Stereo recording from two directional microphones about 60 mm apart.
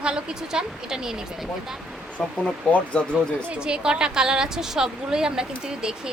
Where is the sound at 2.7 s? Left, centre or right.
Left.